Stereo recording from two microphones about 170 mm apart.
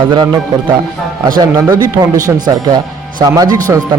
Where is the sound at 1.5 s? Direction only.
15° right (ahead or behind).